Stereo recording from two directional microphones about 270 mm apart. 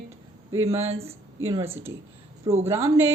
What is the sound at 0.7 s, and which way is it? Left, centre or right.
Speech, right.